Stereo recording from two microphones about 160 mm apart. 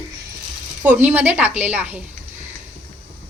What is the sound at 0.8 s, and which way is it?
A woman's voice, 10° right (ahead or behind).